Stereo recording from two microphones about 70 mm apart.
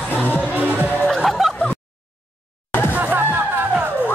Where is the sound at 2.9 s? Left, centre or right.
Right.